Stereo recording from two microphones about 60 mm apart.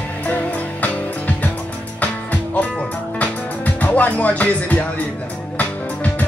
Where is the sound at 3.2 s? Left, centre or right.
Left.